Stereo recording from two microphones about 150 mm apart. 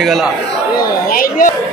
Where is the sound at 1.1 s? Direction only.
70° left (ahead or behind).